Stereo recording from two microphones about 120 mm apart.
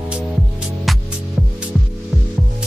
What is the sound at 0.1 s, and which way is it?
Music, 10° right (ahead or behind).